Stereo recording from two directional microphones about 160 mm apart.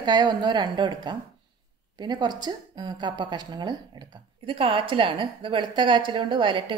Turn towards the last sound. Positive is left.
turn(degrees=-30)  # may be behind; listen again after turning